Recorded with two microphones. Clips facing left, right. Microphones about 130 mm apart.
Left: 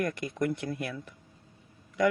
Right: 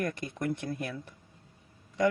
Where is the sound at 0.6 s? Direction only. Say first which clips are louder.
Left 1 dB; 30° right (ahead or behind).